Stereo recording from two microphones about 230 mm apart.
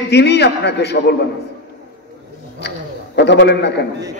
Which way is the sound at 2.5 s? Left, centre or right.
Left.